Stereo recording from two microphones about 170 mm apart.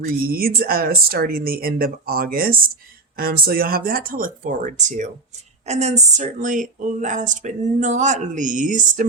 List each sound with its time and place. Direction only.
0.3 s speech: 60° right (ahead or behind)